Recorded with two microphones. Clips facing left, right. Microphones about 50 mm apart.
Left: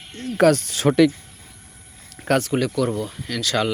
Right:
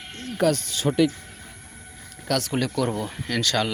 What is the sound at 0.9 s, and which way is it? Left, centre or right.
Speech, left.